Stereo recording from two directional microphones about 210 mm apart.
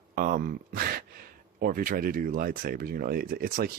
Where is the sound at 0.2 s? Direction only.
45° right (ahead or behind).